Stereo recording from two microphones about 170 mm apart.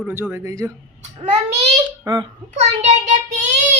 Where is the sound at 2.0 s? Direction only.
25° right (ahead or behind).